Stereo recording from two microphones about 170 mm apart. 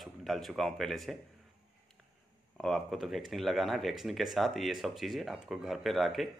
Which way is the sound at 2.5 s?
Centre (ahead or behind).